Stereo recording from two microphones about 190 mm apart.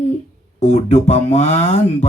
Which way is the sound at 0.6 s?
35° left (ahead or behind).